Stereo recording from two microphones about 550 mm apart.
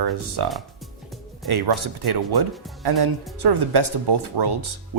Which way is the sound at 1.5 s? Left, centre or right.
Right.